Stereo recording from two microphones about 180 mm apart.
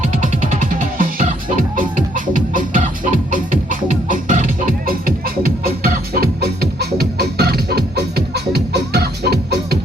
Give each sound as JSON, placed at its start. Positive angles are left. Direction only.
{"t": 0.1, "sound": "music", "side_deg": -45}